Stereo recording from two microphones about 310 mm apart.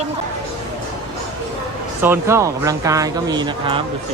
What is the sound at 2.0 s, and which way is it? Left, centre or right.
Speech, centre.